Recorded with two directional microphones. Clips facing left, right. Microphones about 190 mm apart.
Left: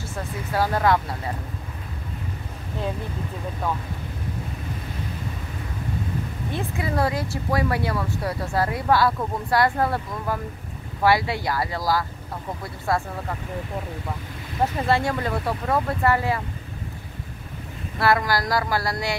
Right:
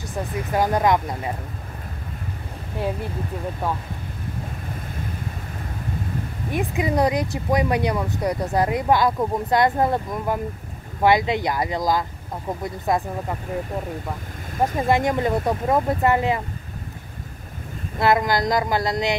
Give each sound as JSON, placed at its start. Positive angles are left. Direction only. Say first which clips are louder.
{"t": 0.1, "sound": "speech", "louder": "right 4 dB", "side_deg": -15}
{"t": 6.5, "sound": "speech", "louder": "right 5 dB", "side_deg": -15}
{"t": 14.9, "sound": "speech", "louder": "right 5 dB", "side_deg": -20}
{"t": 17.9, "sound": "speech", "louder": "right 2 dB", "side_deg": -20}